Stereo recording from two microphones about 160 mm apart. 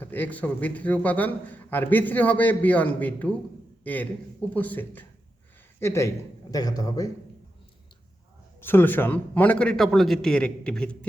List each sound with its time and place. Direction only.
0.0 s a man's voice: 10° left (ahead or behind)
8.6 s a man's voice: 15° left (ahead or behind)